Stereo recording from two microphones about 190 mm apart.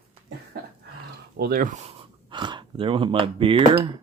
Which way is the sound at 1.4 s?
50° right (ahead or behind).